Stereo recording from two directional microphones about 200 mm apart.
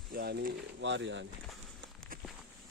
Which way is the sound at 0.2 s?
55° right (ahead or behind).